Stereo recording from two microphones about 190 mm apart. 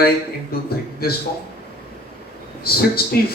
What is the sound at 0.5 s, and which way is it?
Speech, 55° left (ahead or behind).